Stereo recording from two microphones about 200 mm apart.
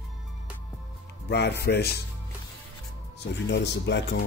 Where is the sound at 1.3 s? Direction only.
55° left (ahead or behind).